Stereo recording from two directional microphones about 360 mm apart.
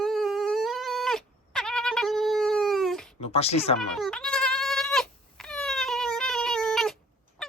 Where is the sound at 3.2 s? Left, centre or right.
Centre.